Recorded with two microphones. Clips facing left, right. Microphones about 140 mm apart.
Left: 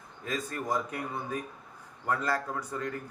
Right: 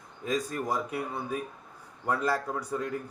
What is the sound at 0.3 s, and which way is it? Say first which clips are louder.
A man's voice: right 3 dB; 15° right (ahead or behind).